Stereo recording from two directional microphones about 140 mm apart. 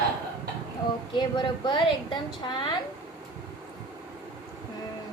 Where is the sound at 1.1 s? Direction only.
35° left (ahead or behind).